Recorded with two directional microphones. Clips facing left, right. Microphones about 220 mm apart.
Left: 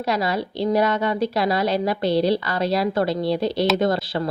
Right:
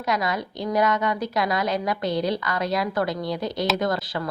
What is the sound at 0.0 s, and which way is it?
A woman's voice, 30° left (ahead or behind).